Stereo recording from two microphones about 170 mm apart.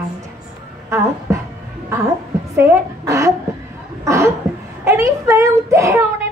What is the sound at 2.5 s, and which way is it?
A woman's voice, 15° right (ahead or behind).